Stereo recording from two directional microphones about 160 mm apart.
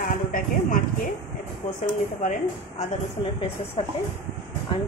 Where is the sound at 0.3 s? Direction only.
60° left (ahead or behind).